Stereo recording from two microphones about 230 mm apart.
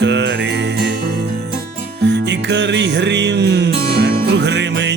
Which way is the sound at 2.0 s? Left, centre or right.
Right.